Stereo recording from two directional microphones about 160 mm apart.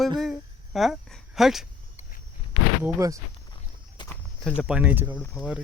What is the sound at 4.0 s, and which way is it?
Walk, 30° left (ahead or behind).